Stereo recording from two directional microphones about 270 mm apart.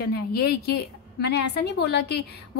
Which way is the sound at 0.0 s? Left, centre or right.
Left.